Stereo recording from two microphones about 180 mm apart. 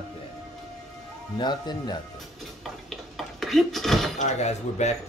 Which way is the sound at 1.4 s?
25° left (ahead or behind).